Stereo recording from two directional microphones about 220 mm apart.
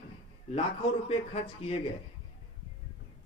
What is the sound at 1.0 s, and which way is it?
Speech, 25° left (ahead or behind).